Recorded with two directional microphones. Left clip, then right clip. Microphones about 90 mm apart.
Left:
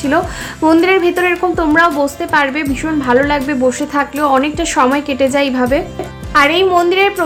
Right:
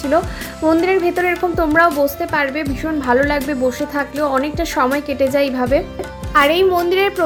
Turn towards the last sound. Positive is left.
turn(degrees=-35)  # may be behind; listen again after turning